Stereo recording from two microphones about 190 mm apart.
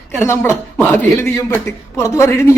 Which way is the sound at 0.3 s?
10° left (ahead or behind).